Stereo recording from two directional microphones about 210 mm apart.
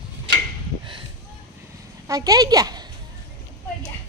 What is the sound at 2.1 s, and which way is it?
Speech, 15° right (ahead or behind).